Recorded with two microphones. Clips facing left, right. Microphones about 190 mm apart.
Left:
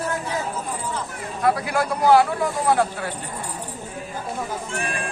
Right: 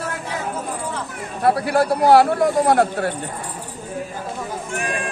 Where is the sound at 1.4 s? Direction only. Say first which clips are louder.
Right 4 dB; 35° right (ahead or behind); by 3.1 s 50° right (ahead or behind).